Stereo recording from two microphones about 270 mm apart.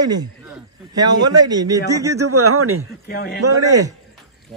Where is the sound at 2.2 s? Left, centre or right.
Right.